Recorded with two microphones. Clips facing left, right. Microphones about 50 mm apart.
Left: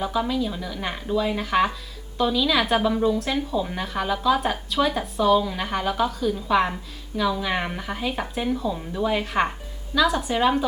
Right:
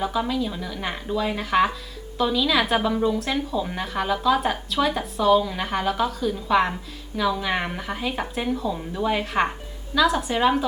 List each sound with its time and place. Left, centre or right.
0.0 s a woman's voice: centre